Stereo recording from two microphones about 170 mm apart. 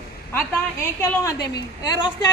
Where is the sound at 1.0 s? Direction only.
15° left (ahead or behind).